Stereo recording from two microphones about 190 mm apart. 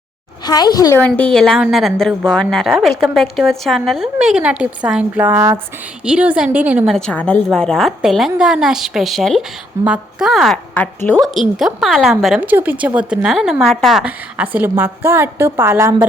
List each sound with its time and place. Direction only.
0.4 s a woman's voice: 20° left (ahead or behind)
1.0 s a woman's voice: 5° left (ahead or behind); by 16.0 s 15° right (ahead or behind)